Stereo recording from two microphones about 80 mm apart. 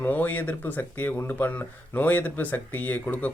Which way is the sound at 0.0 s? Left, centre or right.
Left.